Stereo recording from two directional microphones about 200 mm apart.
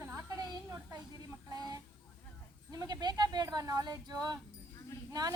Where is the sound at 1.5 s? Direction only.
20° right (ahead or behind).